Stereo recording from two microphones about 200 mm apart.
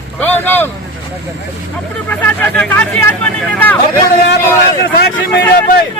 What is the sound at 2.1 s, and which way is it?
Speech, 10° left (ahead or behind).